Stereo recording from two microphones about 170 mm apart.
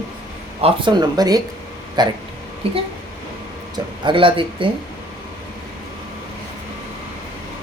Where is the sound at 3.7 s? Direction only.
30° right (ahead or behind).